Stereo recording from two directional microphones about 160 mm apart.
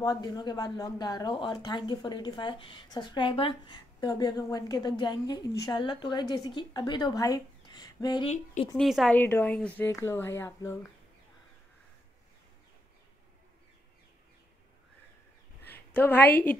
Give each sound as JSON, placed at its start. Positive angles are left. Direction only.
{"t": 0.0, "sound": "speech", "side_deg": 25}
{"t": 8.7, "sound": "a woman's voice", "side_deg": 0}
{"t": 9.1, "sound": "speech", "side_deg": 10}
{"t": 15.7, "sound": "a woman's voice", "side_deg": 10}